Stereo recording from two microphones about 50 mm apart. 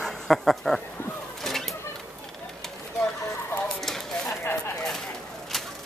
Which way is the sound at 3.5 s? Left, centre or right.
Left.